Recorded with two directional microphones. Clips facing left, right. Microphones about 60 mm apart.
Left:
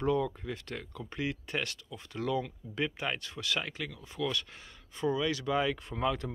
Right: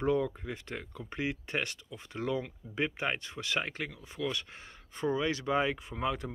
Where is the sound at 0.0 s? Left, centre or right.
Right.